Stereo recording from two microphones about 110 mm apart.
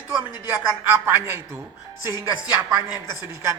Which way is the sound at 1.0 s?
25° right (ahead or behind).